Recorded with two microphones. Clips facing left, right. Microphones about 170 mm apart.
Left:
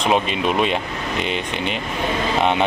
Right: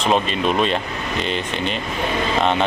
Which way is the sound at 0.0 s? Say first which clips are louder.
Even; 15° left (ahead or behind).